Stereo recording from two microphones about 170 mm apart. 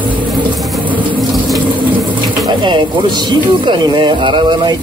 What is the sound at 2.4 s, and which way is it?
Speech, 25° right (ahead or behind).